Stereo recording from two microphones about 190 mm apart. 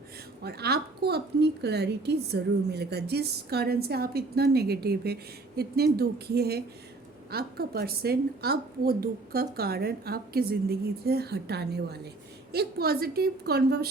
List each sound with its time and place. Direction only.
0.4 s a woman's voice: 55° right (ahead or behind)